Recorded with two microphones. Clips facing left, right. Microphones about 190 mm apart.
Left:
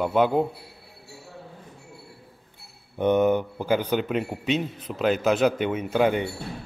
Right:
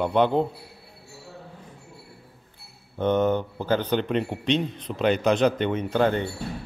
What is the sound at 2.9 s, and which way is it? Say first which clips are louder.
A man's voice: left 2 dB; 10° left (ahead or behind).